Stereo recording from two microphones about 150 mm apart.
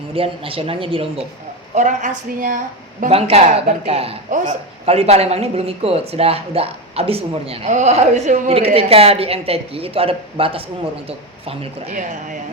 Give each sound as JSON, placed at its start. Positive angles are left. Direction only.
{"t": 0.1, "sound": "speech", "side_deg": -40}
{"t": 1.7, "sound": "a woman's voice", "side_deg": -55}
{"t": 3.1, "sound": "speech", "side_deg": -40}
{"t": 11.9, "sound": "a woman's voice", "side_deg": -60}